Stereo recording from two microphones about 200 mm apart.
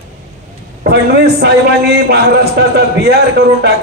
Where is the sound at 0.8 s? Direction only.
55° right (ahead or behind).